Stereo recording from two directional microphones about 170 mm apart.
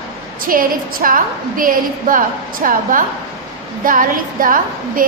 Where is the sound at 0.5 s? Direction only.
55° right (ahead or behind).